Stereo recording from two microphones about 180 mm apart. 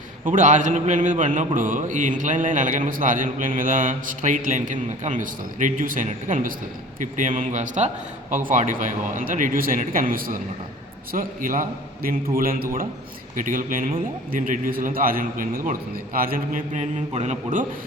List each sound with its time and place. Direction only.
0.3 s mantra: 45° right (ahead or behind)